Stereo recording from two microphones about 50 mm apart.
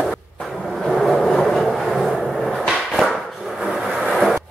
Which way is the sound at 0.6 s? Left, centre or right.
Centre.